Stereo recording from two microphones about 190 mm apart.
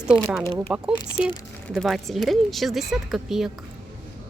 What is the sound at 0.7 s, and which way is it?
Speech, 5° right (ahead or behind).